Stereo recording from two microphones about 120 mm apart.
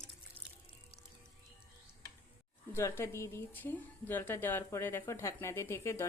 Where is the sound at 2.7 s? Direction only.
25° left (ahead or behind).